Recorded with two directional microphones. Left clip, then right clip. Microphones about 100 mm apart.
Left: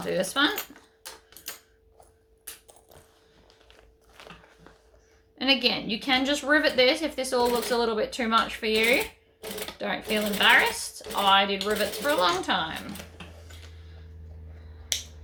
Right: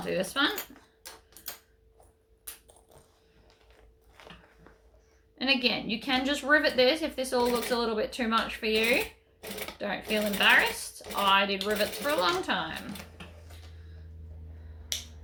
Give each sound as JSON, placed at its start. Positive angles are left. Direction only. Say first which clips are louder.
{"t": 0.0, "sound": "a woman's voice", "louder": "left 3 dB", "side_deg": 25}
{"t": 5.4, "sound": "a woman's voice", "louder": "left 3 dB", "side_deg": 25}
{"t": 14.9, "sound": "a sound", "louder": "left 5 dB", "side_deg": 20}